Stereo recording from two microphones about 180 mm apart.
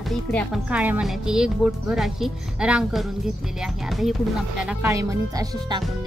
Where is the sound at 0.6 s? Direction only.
10° right (ahead or behind).